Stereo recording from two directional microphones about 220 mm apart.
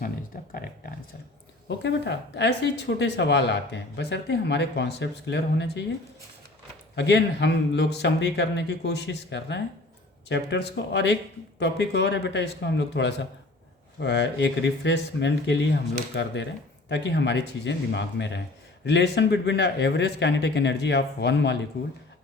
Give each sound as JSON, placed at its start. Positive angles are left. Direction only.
{"t": 0.5, "sound": "a sound", "side_deg": 40}
{"t": 1.8, "sound": "speech", "side_deg": 50}
{"t": 6.9, "sound": "speech", "side_deg": 50}